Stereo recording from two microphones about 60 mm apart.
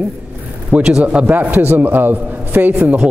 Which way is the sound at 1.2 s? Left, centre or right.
Right.